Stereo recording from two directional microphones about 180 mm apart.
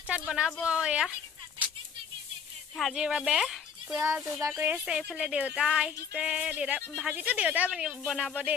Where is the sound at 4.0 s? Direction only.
15° right (ahead or behind).